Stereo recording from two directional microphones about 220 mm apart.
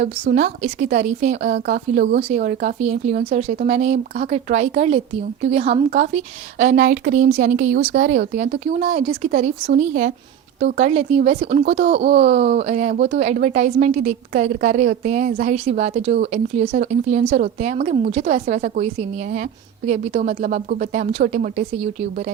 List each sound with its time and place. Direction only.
0.0 s speech: 35° right (ahead or behind)
1.5 s speech: 45° right (ahead or behind); by 12.0 s 30° right (ahead or behind)
12.0 s speech: 50° right (ahead or behind)
12.3 s speech: 30° right (ahead or behind)
19.9 s speech: 35° right (ahead or behind)